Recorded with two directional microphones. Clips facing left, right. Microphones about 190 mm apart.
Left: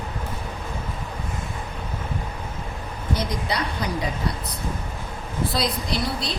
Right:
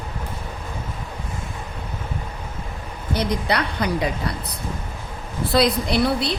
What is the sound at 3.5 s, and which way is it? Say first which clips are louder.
Speech: right 4 dB; 65° right (ahead or behind).